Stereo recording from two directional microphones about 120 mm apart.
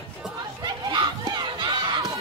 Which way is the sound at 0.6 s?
40° right (ahead or behind).